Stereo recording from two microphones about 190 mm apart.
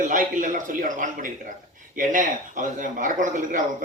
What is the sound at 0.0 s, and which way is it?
A man's voice, 45° right (ahead or behind).